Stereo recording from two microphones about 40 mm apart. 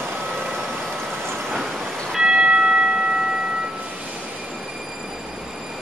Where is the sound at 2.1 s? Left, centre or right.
Centre.